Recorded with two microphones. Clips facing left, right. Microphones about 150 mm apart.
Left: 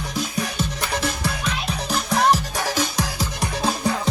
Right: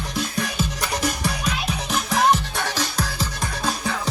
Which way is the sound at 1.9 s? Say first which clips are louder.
Left 1 dB; centre (ahead or behind).